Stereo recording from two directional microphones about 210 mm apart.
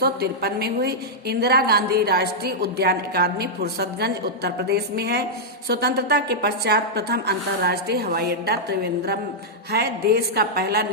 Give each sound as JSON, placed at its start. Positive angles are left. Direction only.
{"t": 0.0, "sound": "a woman's voice", "side_deg": -50}
{"t": 9.7, "sound": "a woman's voice", "side_deg": -50}